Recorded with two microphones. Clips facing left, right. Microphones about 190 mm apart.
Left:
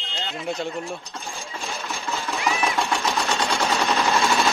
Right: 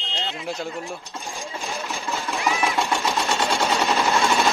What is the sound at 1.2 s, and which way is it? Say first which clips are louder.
Engine: right 2 dB; 15° right (ahead or behind).